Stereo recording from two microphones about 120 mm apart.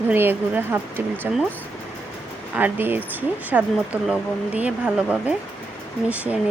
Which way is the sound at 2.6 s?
15° right (ahead or behind).